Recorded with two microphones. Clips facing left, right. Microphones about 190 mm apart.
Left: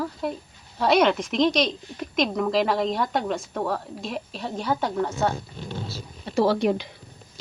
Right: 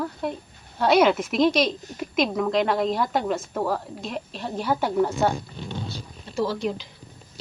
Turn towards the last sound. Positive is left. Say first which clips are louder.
# left 5 dB
turn(degrees=65)  # may be behind; listen again after turning